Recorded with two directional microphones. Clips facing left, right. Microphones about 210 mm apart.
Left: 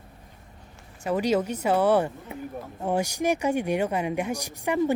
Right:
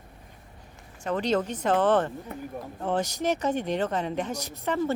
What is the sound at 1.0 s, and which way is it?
Speech, 10° left (ahead or behind).